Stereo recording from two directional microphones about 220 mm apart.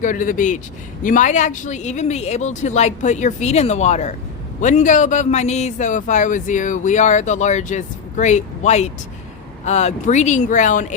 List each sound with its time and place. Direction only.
0.0 s a man's voice: 35° left (ahead or behind)